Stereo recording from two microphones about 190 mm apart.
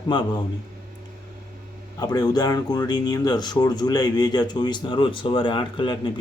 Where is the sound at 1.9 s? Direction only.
20° left (ahead or behind).